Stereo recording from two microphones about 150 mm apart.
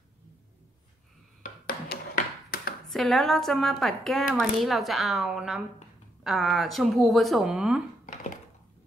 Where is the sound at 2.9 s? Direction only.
Centre (ahead or behind).